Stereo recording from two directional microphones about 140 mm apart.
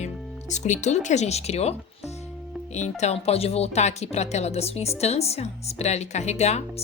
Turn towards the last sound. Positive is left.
turn(degrees=50)  # may be behind; listen again after turning